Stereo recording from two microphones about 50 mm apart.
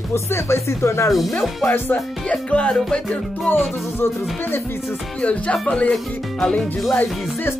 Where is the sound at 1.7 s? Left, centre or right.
Left.